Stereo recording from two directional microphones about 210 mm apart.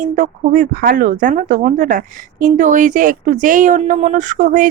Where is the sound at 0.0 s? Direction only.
40° right (ahead or behind).